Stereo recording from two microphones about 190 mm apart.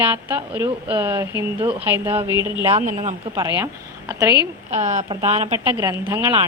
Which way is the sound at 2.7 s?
40° right (ahead or behind).